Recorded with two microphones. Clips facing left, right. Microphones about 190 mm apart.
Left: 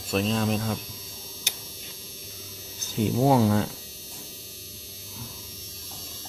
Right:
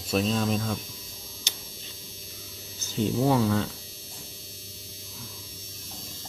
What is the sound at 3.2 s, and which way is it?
Speech, 25° left (ahead or behind).